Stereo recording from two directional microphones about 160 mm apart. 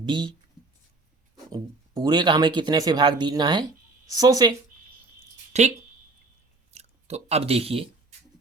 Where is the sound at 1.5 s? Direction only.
25° right (ahead or behind).